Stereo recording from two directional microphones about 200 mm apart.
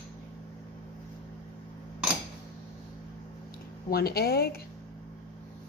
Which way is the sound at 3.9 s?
50° left (ahead or behind).